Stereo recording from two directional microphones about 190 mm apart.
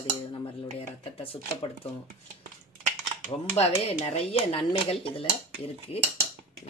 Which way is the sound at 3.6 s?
35° left (ahead or behind).